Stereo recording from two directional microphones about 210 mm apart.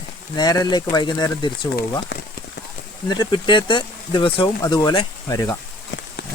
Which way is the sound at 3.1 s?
20° left (ahead or behind).